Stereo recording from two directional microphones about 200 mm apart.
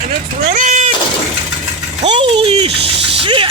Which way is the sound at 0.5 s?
40° right (ahead or behind).